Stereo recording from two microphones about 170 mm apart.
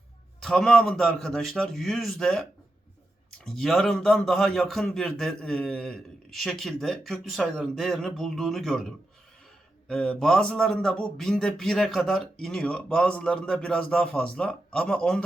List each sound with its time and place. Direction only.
0.4 s a man's voice: 5° left (ahead or behind)
3.4 s a man's voice: centre (ahead or behind)
9.9 s a man's voice: 5° left (ahead or behind)